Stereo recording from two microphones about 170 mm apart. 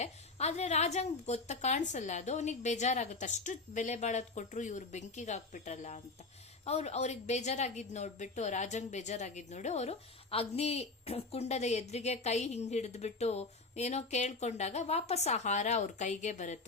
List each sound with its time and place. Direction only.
0.0 s a woman's voice: 40° left (ahead or behind)